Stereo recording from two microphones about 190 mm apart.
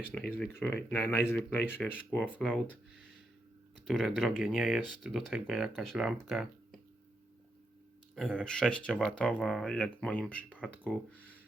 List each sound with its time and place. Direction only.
0.1 s speech: 5° left (ahead or behind)
8.1 s speech: 5° left (ahead or behind)